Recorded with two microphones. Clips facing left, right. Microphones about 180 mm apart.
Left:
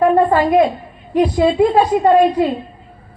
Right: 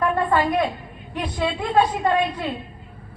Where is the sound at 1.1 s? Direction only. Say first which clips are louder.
Left 12 dB; 35° left (ahead or behind).